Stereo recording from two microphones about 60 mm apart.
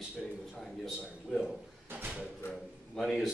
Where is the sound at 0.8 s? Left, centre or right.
Centre.